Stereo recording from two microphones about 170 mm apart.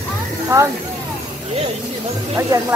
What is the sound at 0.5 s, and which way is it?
Speech, 15° right (ahead or behind).